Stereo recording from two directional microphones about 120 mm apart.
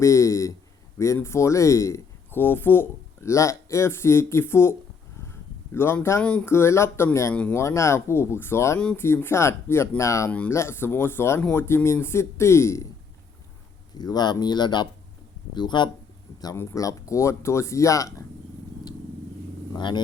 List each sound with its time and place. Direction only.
0.0 s speech: 25° left (ahead or behind)
5.3 s a sound: 20° left (ahead or behind)
6.4 s speech: 20° left (ahead or behind)
14.0 s speech: 35° left (ahead or behind)
16.6 s speech: 25° left (ahead or behind)
19.7 s speech: 40° left (ahead or behind)